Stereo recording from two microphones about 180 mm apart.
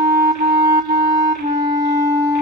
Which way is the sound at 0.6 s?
20° right (ahead or behind).